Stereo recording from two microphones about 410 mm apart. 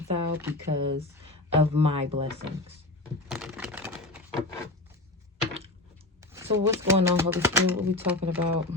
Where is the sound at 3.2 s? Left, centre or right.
Centre.